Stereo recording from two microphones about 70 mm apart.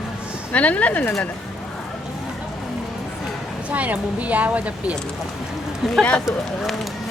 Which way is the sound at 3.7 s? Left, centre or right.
Right.